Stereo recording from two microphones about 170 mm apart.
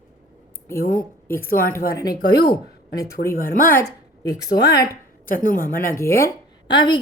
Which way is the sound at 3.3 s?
55° left (ahead or behind).